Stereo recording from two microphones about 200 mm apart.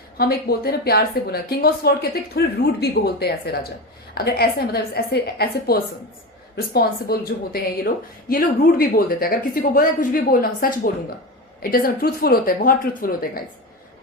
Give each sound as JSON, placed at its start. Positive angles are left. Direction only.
{"t": 0.2, "sound": "a woman's voice", "side_deg": 50}